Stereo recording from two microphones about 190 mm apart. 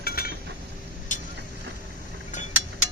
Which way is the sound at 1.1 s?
40° left (ahead or behind).